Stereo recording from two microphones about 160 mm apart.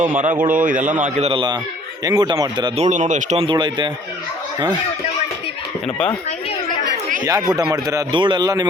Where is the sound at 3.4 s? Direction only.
30° right (ahead or behind).